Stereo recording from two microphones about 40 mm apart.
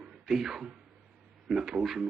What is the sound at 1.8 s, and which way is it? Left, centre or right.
Speech, centre.